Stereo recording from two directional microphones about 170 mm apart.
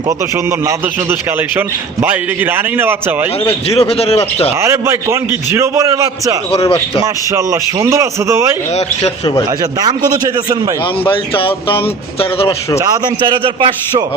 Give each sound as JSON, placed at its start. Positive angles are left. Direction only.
{"t": 1.5, "sound": "a man's voice", "side_deg": -10}
{"t": 3.7, "sound": "a man's voice", "side_deg": 35}
{"t": 4.6, "sound": "a man's voice", "side_deg": -15}
{"t": 6.5, "sound": "a man's voice", "side_deg": 35}
{"t": 7.0, "sound": "a man's voice", "side_deg": -20}
{"t": 8.7, "sound": "a man's voice", "side_deg": 40}
{"t": 11.1, "sound": "a man's voice", "side_deg": 30}
{"t": 12.8, "sound": "a man's voice", "side_deg": -25}